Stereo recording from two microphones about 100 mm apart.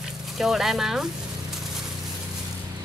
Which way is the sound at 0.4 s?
5° right (ahead or behind).